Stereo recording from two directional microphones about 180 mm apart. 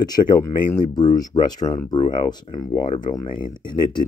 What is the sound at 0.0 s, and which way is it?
Speech, 20° left (ahead or behind).